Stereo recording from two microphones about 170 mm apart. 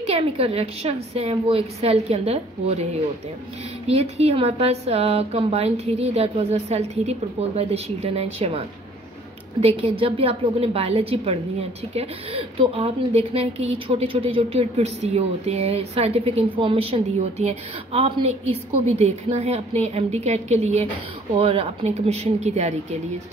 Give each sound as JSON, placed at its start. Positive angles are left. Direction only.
{"t": 0.0, "sound": "speech", "side_deg": -35}